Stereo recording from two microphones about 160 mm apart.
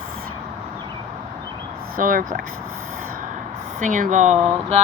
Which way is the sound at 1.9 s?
55° right (ahead or behind).